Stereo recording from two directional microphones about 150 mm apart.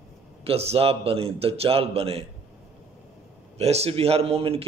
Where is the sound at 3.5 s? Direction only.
45° right (ahead or behind).